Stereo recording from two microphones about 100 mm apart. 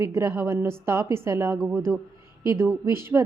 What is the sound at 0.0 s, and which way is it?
A woman's voice, 30° right (ahead or behind).